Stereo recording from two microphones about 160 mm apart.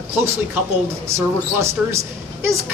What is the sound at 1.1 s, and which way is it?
Speech, 15° right (ahead or behind).